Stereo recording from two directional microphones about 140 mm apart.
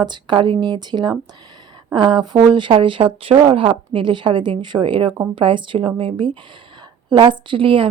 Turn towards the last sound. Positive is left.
turn(degrees=-40)  # may be behind; listen again after turning